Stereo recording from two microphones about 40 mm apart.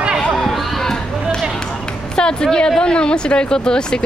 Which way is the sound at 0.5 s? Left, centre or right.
Centre.